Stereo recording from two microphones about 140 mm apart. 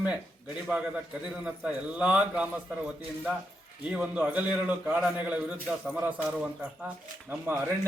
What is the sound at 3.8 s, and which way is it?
A man's voice, 5° right (ahead or behind).